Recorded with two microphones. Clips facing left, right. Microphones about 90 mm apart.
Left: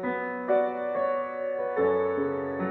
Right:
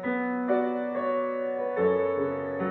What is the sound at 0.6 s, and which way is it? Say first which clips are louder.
Music: left 1 dB; 15° left (ahead or behind).